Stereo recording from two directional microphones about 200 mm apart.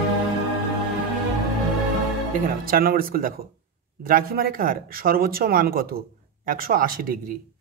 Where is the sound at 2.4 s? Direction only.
45° right (ahead or behind).